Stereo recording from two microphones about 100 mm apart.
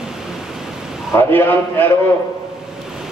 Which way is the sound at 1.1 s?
20° left (ahead or behind).